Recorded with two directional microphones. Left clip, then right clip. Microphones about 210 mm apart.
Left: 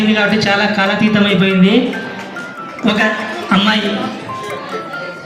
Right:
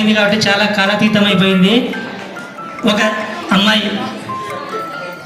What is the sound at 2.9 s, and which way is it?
Music, 50° right (ahead or behind).